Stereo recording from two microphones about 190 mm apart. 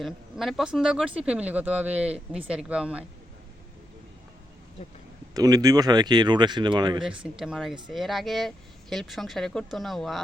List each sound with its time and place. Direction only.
0.0 s speech: centre (ahead or behind)
5.3 s speech: 20° right (ahead or behind)
7.0 s speech: 5° right (ahead or behind)